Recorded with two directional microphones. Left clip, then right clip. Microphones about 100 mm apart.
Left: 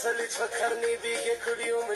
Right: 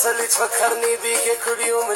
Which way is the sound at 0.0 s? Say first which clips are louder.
Right 9 dB; 30° right (ahead or behind).